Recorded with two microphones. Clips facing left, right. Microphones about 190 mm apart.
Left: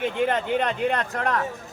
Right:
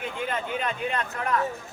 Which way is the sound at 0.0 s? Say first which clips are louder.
Left 7 dB; 70° left (ahead or behind).